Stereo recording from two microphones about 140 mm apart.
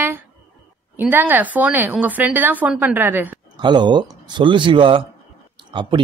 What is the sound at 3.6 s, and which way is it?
A man's voice, 35° right (ahead or behind).